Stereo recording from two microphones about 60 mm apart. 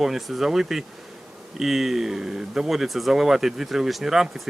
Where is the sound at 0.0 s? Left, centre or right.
Centre.